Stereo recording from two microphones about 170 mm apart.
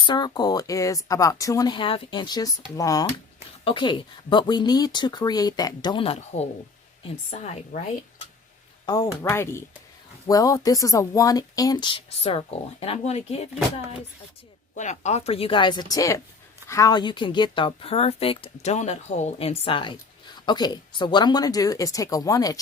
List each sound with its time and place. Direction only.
0.0 s a woman's voice: 25° left (ahead or behind)
3.6 s a woman's voice: 30° left (ahead or behind)
8.9 s a woman's voice: 20° left (ahead or behind); by 13.5 s 35° left (ahead or behind)
14.8 s a woman's voice: 45° left (ahead or behind); by 22.5 s 20° left (ahead or behind)